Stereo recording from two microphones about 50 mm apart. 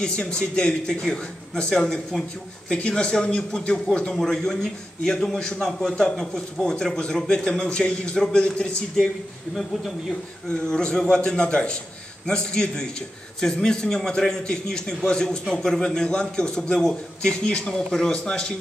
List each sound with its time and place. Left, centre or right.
0.0 s a man's voice: left
9.6 s speech: centre
10.7 s a man's voice: centre
17.8 s a man's voice: centre